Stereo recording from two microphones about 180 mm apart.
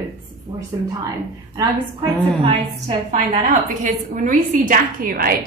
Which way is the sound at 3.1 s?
45° right (ahead or behind).